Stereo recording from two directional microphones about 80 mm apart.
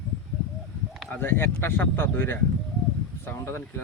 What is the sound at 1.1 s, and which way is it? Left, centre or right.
Speech, left.